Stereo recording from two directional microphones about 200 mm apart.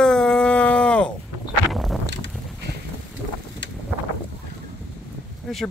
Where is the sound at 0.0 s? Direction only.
5° left (ahead or behind).